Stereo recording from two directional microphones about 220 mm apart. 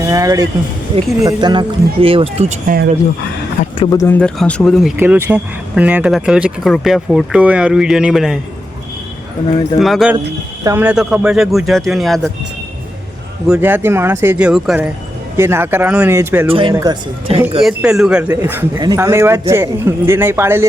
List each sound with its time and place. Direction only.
0.0 s speech: 15° right (ahead or behind); by 2.7 s 30° right (ahead or behind)
3.8 s speech: 15° left (ahead or behind); by 8.4 s centre (ahead or behind)
9.7 s speech: centre (ahead or behind)
10.6 s speech: 10° right (ahead or behind)
13.5 s a man's voice: 10° right (ahead or behind)
16.5 s speech: 25° right (ahead or behind)
17.6 s a man's voice: centre (ahead or behind)